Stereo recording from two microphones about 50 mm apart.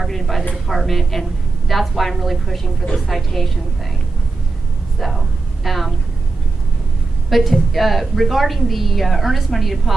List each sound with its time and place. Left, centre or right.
0.0 s a woman's voice: centre
4.9 s a woman's voice: centre
7.2 s a woman's voice: centre